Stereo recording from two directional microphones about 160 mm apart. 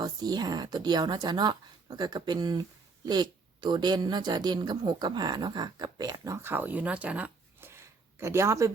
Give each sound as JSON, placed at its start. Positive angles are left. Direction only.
{"t": 0.0, "sound": "a woman's voice", "side_deg": -25}